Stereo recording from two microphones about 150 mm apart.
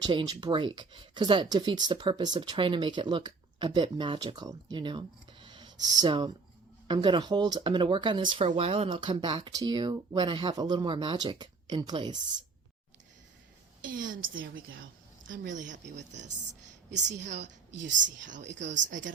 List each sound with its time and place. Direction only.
0.0 s speech: 30° right (ahead or behind)
8.4 s speech: 40° right (ahead or behind)
13.8 s a woman's voice: 65° right (ahead or behind)
15.3 s a woman's voice: 60° right (ahead or behind)